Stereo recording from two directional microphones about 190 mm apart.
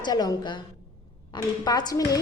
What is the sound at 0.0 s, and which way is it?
A woman's voice, 20° left (ahead or behind).